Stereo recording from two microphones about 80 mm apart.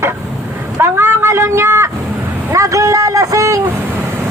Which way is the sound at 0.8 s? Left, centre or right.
Right.